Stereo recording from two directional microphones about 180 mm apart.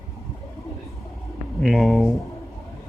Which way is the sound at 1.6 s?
Centre (ahead or behind).